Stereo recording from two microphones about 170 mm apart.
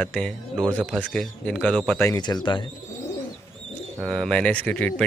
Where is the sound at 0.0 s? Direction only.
5° left (ahead or behind).